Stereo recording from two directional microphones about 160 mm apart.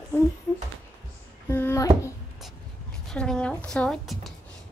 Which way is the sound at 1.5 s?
15° left (ahead or behind).